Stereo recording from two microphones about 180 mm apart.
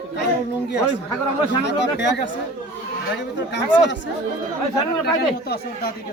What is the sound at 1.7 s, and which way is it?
Speech, 75° left (ahead or behind).